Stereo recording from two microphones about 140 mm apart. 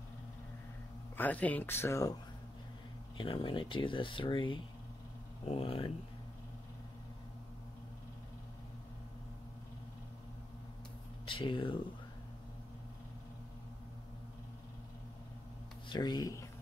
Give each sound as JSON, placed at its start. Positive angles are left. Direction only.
{"t": 1.1, "sound": "speech", "side_deg": 10}
{"t": 3.2, "sound": "speech", "side_deg": 40}
{"t": 11.2, "sound": "speech", "side_deg": 35}
{"t": 15.9, "sound": "speech", "side_deg": 30}